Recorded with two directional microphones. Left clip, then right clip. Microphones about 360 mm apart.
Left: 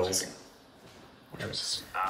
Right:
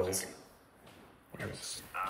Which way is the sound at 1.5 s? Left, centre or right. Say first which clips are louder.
Left 12 dB; centre.